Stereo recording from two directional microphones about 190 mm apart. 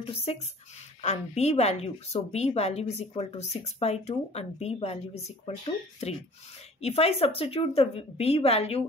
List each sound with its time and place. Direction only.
0.0 s a woman's voice: 30° left (ahead or behind)